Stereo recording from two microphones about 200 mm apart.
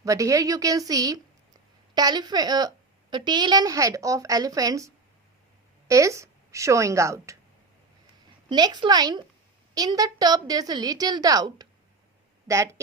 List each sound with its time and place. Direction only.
0.0 s a woman's voice: 15° right (ahead or behind)
5.9 s a woman's voice: 15° right (ahead or behind)
8.4 s a woman's voice: 20° right (ahead or behind)